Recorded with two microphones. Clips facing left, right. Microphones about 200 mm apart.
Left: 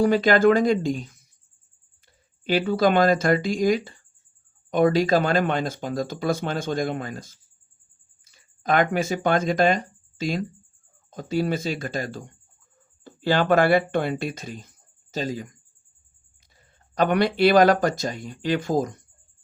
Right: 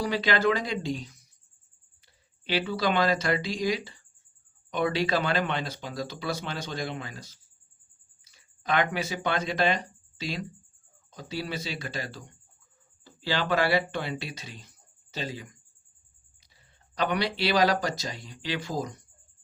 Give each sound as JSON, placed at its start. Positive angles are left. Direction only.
{"t": 0.0, "sound": "speech", "side_deg": 50}
{"t": 2.4, "sound": "speech", "side_deg": 45}
{"t": 16.6, "sound": "speech", "side_deg": 50}